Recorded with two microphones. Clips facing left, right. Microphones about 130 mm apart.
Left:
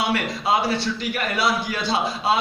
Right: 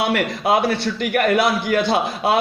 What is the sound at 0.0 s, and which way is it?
A man's voice, 60° right (ahead or behind).